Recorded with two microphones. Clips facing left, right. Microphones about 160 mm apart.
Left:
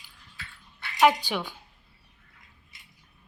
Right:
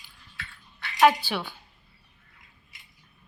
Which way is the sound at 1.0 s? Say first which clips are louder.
Right 1 dB; 15° left (ahead or behind).